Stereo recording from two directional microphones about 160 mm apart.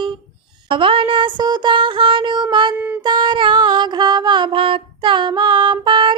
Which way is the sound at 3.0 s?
25° right (ahead or behind).